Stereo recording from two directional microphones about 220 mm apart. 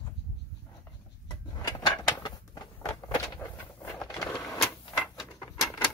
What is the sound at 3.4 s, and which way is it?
Vehicle, 10° left (ahead or behind).